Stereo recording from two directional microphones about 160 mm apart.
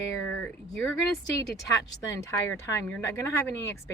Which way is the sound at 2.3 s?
15° left (ahead or behind).